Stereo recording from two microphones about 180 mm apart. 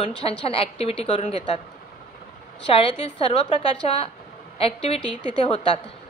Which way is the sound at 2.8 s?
30° left (ahead or behind).